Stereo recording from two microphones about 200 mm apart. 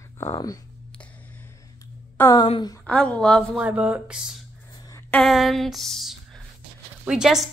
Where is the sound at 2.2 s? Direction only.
15° left (ahead or behind).